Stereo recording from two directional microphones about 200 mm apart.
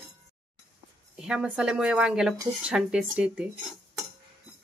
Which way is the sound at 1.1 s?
5° right (ahead or behind).